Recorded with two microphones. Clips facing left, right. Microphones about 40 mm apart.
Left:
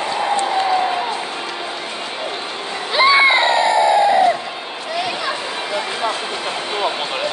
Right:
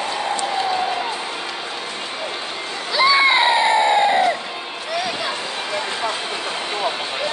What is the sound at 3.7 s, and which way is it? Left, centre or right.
Crowd, right.